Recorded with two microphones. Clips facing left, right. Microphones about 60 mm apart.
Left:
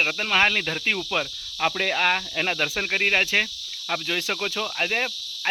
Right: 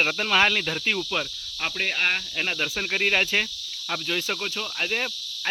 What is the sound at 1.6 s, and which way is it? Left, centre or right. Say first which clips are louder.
Speech: left 4 dB; left.